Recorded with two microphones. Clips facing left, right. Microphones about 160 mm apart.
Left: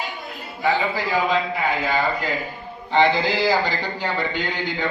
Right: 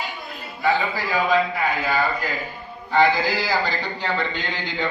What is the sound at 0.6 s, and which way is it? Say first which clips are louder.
A man's voice: even; 20° left (ahead or behind).